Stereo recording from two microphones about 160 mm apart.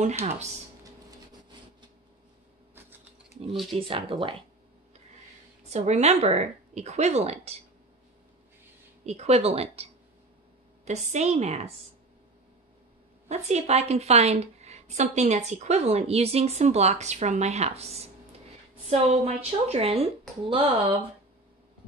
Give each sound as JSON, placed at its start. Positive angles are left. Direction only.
{"t": 3.7, "sound": "speech", "side_deg": -35}
{"t": 5.7, "sound": "a woman's voice", "side_deg": -45}
{"t": 9.0, "sound": "speech", "side_deg": -40}
{"t": 10.9, "sound": "a woman's voice", "side_deg": -45}
{"t": 13.3, "sound": "a woman's voice", "side_deg": -45}